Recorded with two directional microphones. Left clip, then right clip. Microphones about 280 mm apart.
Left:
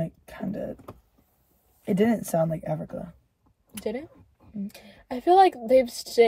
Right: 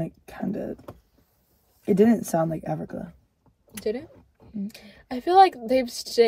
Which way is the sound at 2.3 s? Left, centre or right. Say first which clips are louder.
Even; right.